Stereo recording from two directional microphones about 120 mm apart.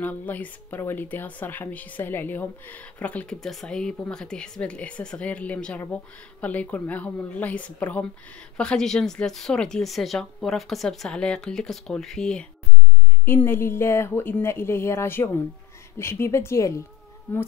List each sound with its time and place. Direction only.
0.0 s speech: 15° left (ahead or behind)
13.2 s speech: 20° left (ahead or behind)